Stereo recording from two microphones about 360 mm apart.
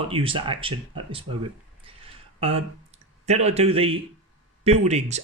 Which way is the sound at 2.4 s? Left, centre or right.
Centre.